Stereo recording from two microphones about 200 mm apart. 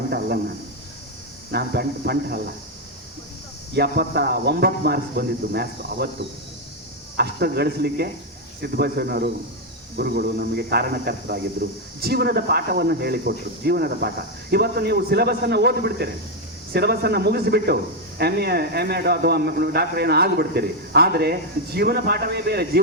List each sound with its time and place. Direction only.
0.1 s a man's voice: 50° right (ahead or behind)
3.8 s a man's voice: 50° right (ahead or behind)
7.2 s a man's voice: 55° right (ahead or behind)